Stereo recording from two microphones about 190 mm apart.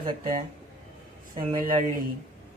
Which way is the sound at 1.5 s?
45° right (ahead or behind).